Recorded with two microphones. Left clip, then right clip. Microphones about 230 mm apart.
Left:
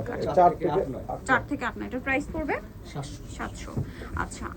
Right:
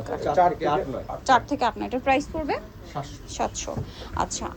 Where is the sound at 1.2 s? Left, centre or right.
Centre.